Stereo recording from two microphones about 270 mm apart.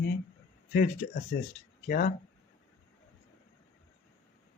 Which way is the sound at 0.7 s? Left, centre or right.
Left.